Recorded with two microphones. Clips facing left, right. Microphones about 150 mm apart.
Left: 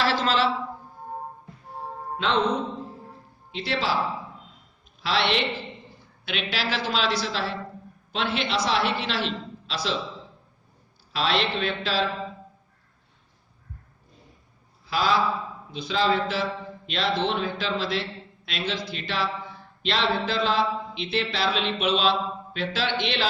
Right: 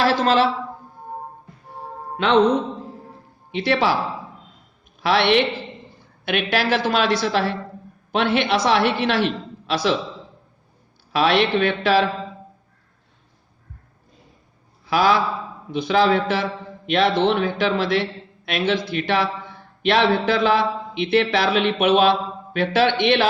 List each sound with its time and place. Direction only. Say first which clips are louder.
0.0 s a man's voice: right 6 dB; 50° right (ahead or behind)
2.1 s speech: right 8 dB; 65° right (ahead or behind)
3.5 s a man's voice: right 8 dB; 65° right (ahead or behind)
4.9 s a man's voice: right 7 dB; 60° right (ahead or behind)
11.1 s a man's voice: right 7 dB; 65° right (ahead or behind)
14.8 s a man's voice: right 5 dB; 65° right (ahead or behind)